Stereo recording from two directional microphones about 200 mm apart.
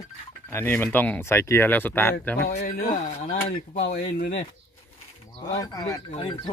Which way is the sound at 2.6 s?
50° left (ahead or behind).